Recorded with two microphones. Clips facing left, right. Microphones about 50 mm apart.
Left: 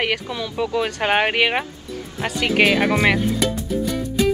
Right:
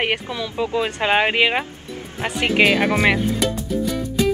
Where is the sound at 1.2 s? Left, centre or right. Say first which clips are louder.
Right 1 dB; right.